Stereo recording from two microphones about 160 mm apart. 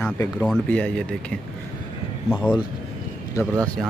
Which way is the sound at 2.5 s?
30° left (ahead or behind).